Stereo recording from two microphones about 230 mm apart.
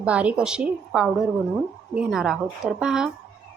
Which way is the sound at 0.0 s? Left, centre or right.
Centre.